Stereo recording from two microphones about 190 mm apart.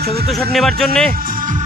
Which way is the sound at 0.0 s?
55° right (ahead or behind).